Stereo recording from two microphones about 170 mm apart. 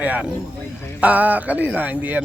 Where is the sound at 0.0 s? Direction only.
10° right (ahead or behind).